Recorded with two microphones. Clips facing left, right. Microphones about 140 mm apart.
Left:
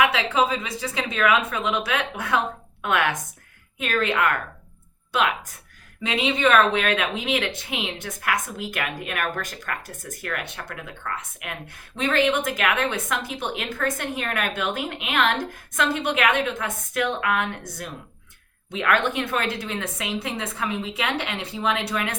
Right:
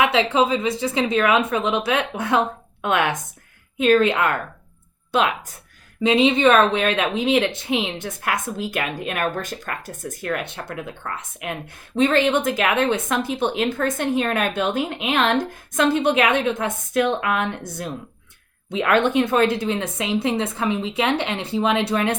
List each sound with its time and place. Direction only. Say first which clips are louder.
0.1 s speech: right 4 dB; 25° right (ahead or behind)
6.0 s speech: right 7 dB; 25° right (ahead or behind)